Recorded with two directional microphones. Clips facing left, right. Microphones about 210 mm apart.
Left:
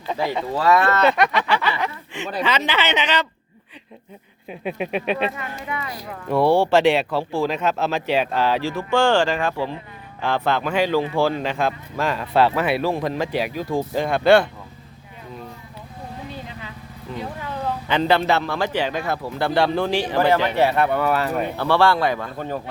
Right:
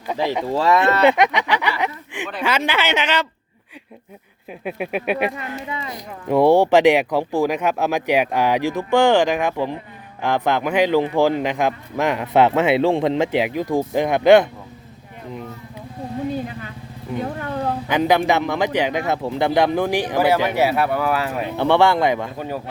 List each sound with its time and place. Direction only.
0.5 s speech: 25° right (ahead or behind); by 3.2 s 10° right (ahead or behind)
4.6 s speech: 5° right (ahead or behind)
17.8 s speech: 10° right (ahead or behind)
21.5 s a man's voice: 20° right (ahead or behind)